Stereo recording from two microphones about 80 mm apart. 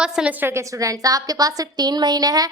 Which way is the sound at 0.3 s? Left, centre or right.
Right.